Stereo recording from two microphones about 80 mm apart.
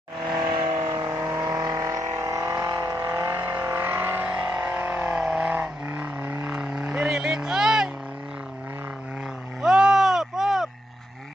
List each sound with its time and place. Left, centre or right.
0.3 s vehicle: right
0.7 s vehicle: right
3.2 s vehicle: right
3.4 s vehicle: right; by 7.9 s centre
9.6 s a sound: centre